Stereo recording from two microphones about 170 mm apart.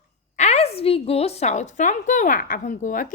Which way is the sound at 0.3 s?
40° left (ahead or behind).